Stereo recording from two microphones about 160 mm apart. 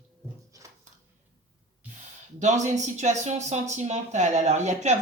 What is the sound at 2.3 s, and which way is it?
Speech, 50° right (ahead or behind).